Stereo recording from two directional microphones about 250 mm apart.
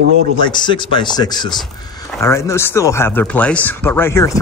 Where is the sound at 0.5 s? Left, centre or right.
Centre.